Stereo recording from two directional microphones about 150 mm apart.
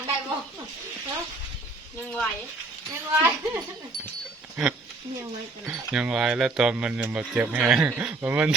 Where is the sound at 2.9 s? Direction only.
15° right (ahead or behind).